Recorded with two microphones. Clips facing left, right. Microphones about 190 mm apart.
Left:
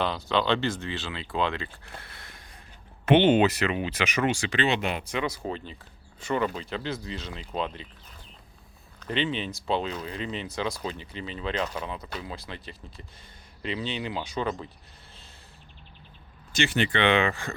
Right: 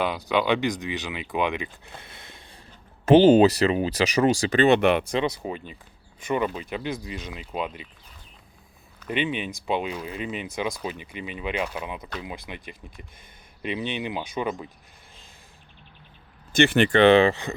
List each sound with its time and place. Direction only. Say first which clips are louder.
0.0 s speech: right 2 dB; 10° right (ahead or behind)
3.1 s speech: right 5 dB; 35° right (ahead or behind); by 5.0 s 65° right (ahead or behind)
5.2 s speech: right 3 dB; 15° right (ahead or behind)
9.0 s speech: right 2 dB; 15° right (ahead or behind)
16.5 s speech: right 7 dB; 55° right (ahead or behind)
17.0 s speech: right 8 dB; 35° right (ahead or behind)